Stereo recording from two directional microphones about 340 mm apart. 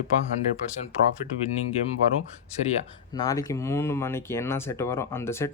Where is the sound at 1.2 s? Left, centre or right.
Centre.